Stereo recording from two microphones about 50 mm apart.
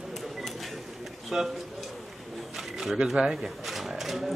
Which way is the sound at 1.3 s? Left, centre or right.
Centre.